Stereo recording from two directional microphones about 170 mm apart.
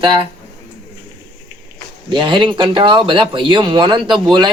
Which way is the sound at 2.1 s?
25° right (ahead or behind).